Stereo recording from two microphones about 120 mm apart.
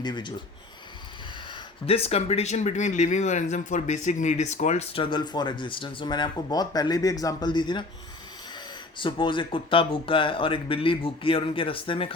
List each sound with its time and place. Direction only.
0.0 s speech: 40° left (ahead or behind)
1.9 s speech: 60° left (ahead or behind); by 4.9 s 75° left (ahead or behind)
4.9 s speech: 40° left (ahead or behind)
9.0 s speech: 45° left (ahead or behind)